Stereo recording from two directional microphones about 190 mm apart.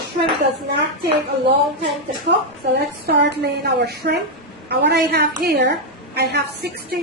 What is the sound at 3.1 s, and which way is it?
A woman's voice, 60° right (ahead or behind).